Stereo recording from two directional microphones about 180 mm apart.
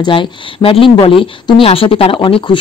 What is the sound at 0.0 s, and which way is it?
Speech, 30° left (ahead or behind).